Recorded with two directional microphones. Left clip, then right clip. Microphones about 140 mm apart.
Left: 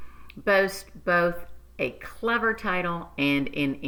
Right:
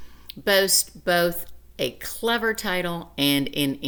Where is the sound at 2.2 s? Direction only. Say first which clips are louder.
Right 1 dB; 30° right (ahead or behind).